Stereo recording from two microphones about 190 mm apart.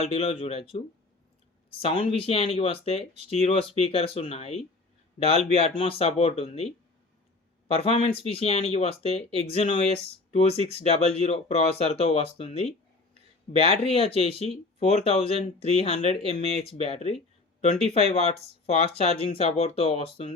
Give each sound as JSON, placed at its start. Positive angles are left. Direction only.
{"t": 0.0, "sound": "speech", "side_deg": 30}
{"t": 1.8, "sound": "speech", "side_deg": 30}
{"t": 7.7, "sound": "speech", "side_deg": 30}